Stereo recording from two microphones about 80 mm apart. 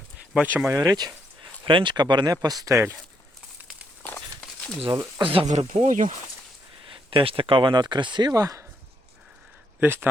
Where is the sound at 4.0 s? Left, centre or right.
Left.